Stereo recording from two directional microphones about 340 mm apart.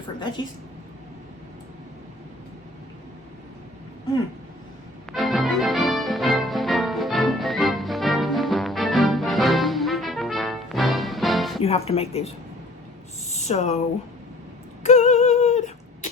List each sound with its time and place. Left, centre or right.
5.1 s music: centre
11.6 s speech: centre
13.3 s speech: centre
14.8 s a sound: left